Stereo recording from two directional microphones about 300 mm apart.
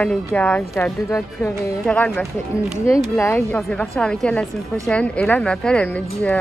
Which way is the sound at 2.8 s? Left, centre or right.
Centre.